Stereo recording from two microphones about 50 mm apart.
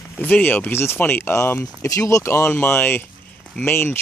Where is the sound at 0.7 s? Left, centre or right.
Left.